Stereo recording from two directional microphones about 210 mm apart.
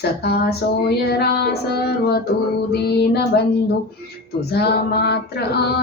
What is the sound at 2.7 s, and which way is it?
Child singing, 50° left (ahead or behind).